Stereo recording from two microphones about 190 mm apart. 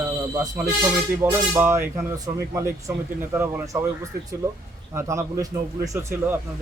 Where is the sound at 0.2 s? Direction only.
15° right (ahead or behind).